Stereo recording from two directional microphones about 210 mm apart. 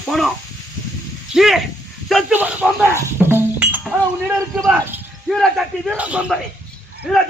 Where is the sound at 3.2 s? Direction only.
10° right (ahead or behind).